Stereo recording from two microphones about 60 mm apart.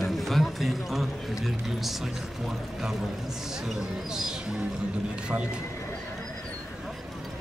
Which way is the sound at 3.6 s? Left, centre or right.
Centre.